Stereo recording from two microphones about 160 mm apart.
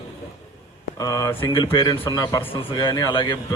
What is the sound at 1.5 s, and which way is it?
Speech, 30° left (ahead or behind).